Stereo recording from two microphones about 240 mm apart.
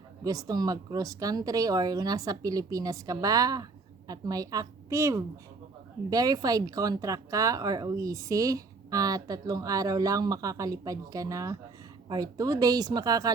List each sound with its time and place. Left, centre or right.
0.3 s speech: centre